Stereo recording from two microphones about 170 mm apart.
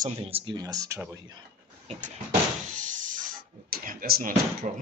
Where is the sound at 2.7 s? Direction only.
50° right (ahead or behind).